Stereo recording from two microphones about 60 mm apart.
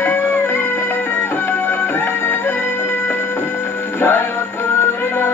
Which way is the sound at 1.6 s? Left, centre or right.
Left.